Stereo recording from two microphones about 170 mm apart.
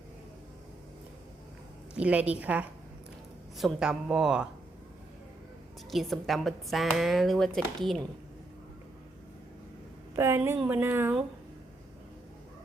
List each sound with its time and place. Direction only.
2.0 s speech: 10° right (ahead or behind)
5.9 s speech: centre (ahead or behind)
10.2 s speech: 15° right (ahead or behind)